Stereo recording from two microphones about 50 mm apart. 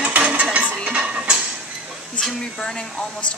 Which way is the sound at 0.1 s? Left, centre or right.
Right.